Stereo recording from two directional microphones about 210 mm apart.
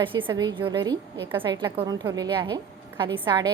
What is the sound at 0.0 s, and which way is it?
A woman's voice, 25° right (ahead or behind).